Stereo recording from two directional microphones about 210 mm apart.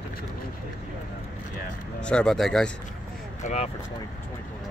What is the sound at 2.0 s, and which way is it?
Speech, 5° left (ahead or behind).